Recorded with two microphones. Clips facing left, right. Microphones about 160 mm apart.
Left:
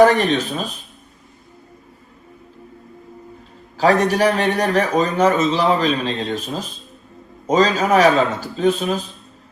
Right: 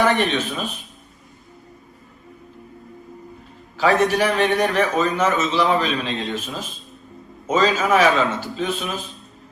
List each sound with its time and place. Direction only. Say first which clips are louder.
0.0 s a man's voice: left 6 dB; 40° left (ahead or behind)
3.8 s a man's voice: left 2 dB; 35° left (ahead or behind)